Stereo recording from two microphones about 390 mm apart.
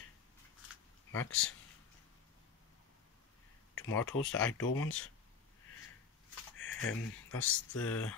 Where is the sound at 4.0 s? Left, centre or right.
Left.